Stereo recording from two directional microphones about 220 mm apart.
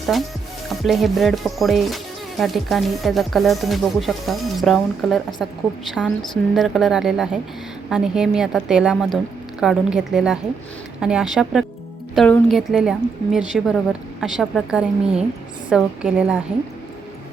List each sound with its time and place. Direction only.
0.1 s speech: centre (ahead or behind)